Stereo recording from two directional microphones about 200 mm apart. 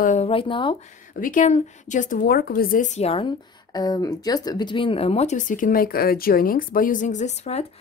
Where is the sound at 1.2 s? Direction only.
40° left (ahead or behind).